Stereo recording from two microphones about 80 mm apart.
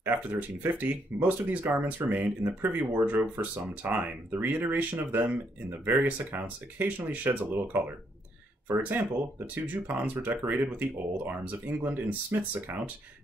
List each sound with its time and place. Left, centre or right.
0.0 s speech: right